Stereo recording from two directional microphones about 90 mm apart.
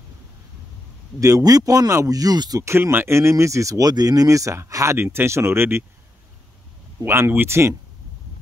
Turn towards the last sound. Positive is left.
turn(degrees=-30)  # may be behind; listen again after turning